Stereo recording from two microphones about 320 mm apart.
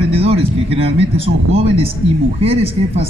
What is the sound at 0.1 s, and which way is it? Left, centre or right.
A man's voice, centre.